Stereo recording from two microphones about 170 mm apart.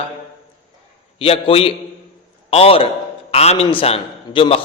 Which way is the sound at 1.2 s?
35° left (ahead or behind).